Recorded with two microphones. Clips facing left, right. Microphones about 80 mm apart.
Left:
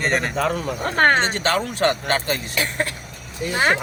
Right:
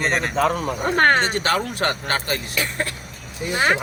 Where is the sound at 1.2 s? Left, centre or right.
Left.